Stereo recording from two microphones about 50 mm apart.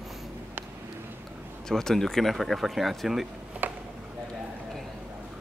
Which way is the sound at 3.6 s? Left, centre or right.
Right.